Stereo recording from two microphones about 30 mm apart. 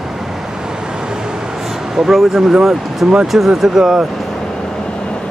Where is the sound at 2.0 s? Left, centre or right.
Centre.